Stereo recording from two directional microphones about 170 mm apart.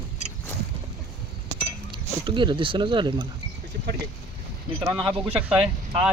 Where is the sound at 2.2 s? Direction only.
30° right (ahead or behind).